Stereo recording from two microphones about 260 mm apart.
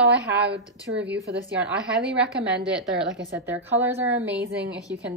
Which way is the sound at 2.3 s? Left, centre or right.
Centre.